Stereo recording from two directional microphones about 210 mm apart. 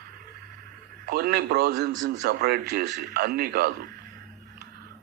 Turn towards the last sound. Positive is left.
turn(degrees=-50)  # may be behind; listen again after turning